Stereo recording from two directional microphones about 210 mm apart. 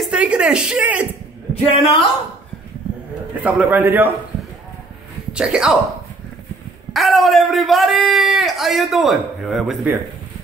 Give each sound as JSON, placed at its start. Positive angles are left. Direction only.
{"t": 0.0, "sound": "a man's voice", "side_deg": -5}
{"t": 1.5, "sound": "a man's voice", "side_deg": 25}
{"t": 3.4, "sound": "a man's voice", "side_deg": -5}
{"t": 5.3, "sound": "a man's voice", "side_deg": -5}
{"t": 6.9, "sound": "a man's voice", "side_deg": 0}